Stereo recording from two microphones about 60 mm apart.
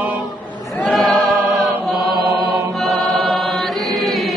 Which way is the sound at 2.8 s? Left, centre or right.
Centre.